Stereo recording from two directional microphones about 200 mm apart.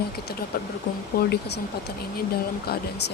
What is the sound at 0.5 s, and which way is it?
Speech, 45° left (ahead or behind).